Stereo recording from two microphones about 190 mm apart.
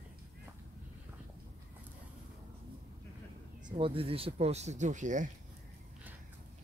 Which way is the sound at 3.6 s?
25° right (ahead or behind).